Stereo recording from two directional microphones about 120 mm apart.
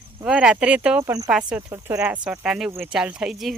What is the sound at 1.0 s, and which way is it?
Speech, 25° right (ahead or behind).